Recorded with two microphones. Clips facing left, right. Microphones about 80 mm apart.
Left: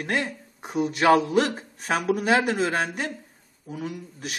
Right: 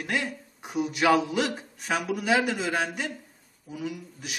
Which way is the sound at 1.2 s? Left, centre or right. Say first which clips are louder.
Left 5 dB; left.